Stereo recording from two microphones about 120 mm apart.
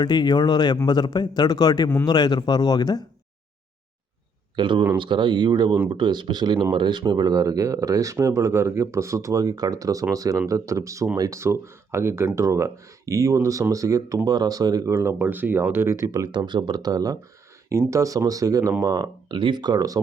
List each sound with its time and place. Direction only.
0.0 s a man's voice: 35° left (ahead or behind)
4.5 s a man's voice: 40° right (ahead or behind); by 16.3 s 25° right (ahead or behind)
16.3 s speech: 40° right (ahead or behind)
19.3 s speech: 40° right (ahead or behind)